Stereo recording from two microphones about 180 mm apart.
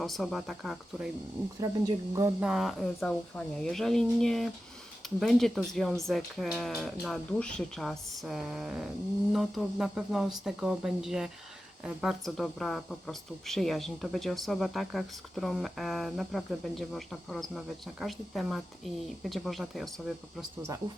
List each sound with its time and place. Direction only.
0.0 s speech: centre (ahead or behind)
1.9 s speech: 15° right (ahead or behind)
2.4 s speech: 5° right (ahead or behind)